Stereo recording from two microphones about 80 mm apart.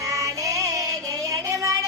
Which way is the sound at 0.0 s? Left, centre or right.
Right.